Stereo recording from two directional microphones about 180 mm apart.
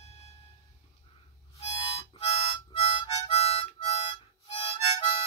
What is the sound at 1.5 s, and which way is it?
Harmonica, 30° left (ahead or behind).